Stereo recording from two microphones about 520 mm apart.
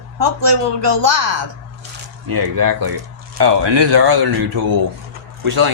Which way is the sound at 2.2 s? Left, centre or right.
Right.